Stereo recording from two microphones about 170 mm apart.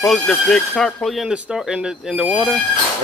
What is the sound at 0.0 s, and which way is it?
Speech, centre (ahead or behind).